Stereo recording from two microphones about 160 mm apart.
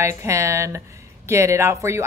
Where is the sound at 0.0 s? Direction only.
20° right (ahead or behind).